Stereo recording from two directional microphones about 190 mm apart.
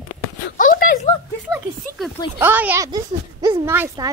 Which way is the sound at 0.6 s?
45° left (ahead or behind).